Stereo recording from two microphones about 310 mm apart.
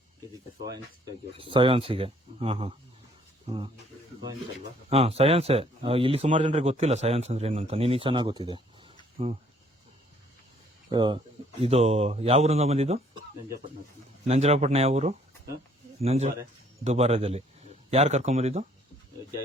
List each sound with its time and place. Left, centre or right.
0.6 s speech: centre
4.9 s speech: centre
10.8 s speech: centre
14.3 s speech: centre